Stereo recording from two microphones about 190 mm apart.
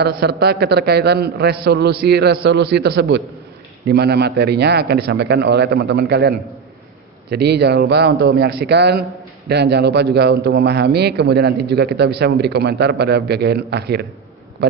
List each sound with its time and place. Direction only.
0.0 s a man's voice: 60° right (ahead or behind)